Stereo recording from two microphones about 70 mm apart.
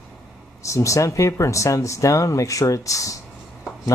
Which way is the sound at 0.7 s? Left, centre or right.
Left.